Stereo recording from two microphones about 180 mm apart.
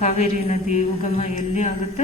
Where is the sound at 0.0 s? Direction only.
40° left (ahead or behind).